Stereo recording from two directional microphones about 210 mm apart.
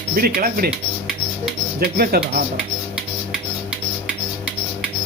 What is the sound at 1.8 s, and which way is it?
Speech, 45° right (ahead or behind).